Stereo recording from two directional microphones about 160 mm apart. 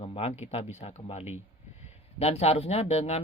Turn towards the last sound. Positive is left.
turn(degrees=40)  # may be behind; listen again after turning